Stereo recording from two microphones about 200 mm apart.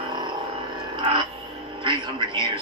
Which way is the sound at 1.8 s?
25° right (ahead or behind).